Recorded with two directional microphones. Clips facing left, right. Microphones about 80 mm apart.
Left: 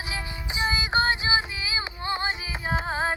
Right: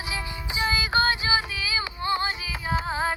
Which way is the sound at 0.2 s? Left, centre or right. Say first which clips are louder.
Even; left.